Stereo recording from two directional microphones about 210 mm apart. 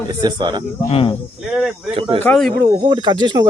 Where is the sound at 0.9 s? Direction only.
25° left (ahead or behind).